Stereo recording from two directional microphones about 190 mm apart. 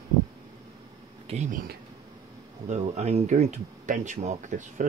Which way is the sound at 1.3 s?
40° right (ahead or behind).